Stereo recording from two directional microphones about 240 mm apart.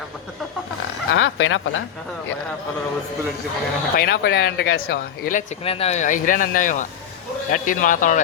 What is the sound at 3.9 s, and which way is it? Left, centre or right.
A man's voice, left.